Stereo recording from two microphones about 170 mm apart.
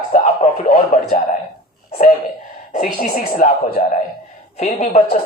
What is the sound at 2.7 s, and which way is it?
A woman's voice, 55° left (ahead or behind).